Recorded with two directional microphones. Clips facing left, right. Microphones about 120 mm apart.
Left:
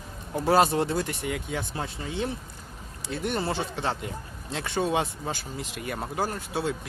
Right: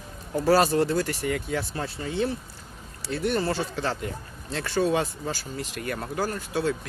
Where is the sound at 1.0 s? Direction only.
Centre (ahead or behind).